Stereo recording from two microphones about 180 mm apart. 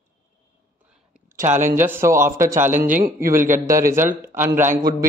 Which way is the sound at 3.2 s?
50° right (ahead or behind).